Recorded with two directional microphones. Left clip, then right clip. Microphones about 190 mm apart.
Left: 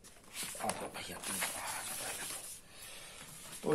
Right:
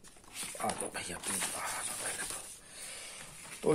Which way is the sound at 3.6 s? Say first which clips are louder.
Right 4 dB; 40° right (ahead or behind).